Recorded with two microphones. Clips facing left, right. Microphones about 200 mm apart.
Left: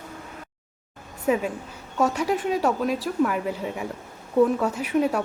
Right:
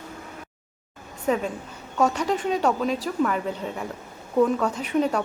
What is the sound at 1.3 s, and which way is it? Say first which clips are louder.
A woman's voice: left 1 dB; 5° left (ahead or behind).